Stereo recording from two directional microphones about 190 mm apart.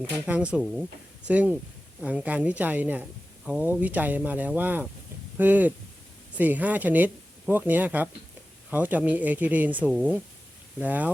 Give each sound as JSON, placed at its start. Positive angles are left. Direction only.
{"t": 0.3, "sound": "speech", "side_deg": -5}